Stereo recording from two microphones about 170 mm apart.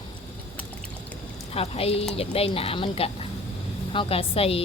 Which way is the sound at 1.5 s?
35° left (ahead or behind).